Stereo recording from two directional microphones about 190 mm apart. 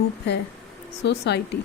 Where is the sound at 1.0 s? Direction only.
65° left (ahead or behind).